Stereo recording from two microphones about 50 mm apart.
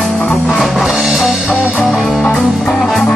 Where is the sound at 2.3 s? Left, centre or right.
Centre.